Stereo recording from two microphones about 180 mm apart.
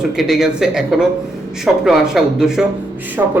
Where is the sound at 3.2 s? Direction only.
15° right (ahead or behind).